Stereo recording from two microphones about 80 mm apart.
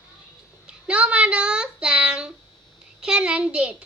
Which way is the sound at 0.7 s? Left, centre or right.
Centre.